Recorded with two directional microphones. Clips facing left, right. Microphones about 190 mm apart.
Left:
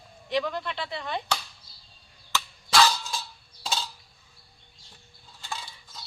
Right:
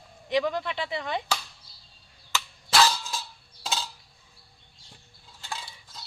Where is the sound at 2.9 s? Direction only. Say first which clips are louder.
Left 1 dB; centre (ahead or behind).